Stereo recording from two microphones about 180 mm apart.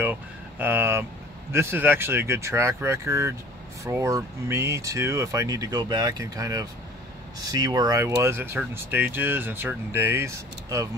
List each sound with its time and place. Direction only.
0.0 s speech: 10° right (ahead or behind)